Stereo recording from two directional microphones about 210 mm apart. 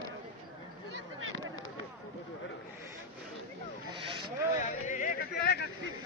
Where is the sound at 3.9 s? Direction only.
25° right (ahead or behind).